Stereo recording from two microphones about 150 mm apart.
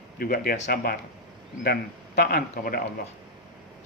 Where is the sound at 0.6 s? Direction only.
90° left.